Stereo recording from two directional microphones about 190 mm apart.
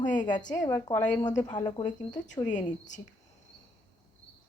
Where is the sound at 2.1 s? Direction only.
40° left (ahead or behind).